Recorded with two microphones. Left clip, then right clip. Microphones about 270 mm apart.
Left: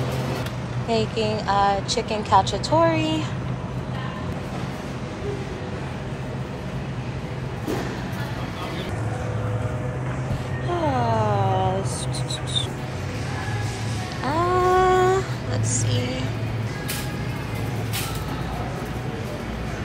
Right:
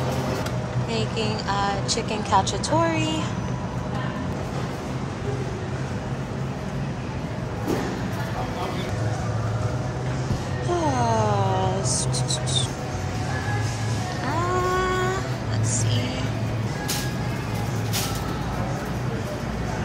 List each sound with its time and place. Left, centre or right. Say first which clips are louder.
0.8 s a woman's voice: left 5 dB; centre
10.7 s music: even; centre
14.2 s a sound: left 4 dB; centre